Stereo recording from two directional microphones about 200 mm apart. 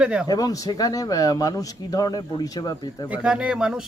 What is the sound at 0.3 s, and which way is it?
Speech, 20° left (ahead or behind).